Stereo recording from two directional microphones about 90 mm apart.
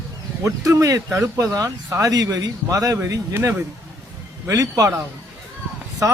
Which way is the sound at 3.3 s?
30° right (ahead or behind).